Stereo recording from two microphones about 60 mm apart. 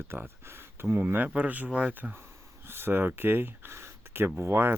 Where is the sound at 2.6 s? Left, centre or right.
Right.